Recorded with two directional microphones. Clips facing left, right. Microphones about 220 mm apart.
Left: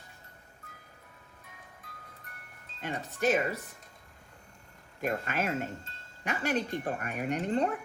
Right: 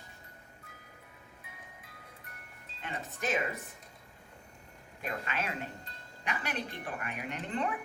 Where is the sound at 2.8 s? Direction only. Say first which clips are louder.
Left 6 dB; 40° left (ahead or behind).